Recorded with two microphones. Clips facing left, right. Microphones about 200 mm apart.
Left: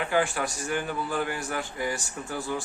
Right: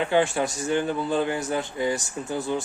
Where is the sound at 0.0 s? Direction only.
25° right (ahead or behind).